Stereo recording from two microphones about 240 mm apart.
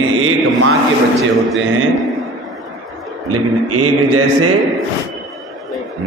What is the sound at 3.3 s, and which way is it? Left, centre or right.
Mantra, right.